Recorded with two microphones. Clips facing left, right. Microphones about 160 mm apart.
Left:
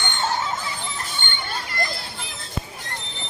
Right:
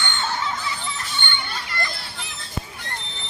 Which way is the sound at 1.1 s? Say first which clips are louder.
Even; 45° left (ahead or behind).